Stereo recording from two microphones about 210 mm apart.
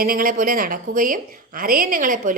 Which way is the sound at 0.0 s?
40° right (ahead or behind).